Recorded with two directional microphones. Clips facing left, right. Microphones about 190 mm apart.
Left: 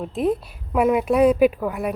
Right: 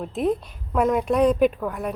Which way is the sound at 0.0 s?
Centre (ahead or behind).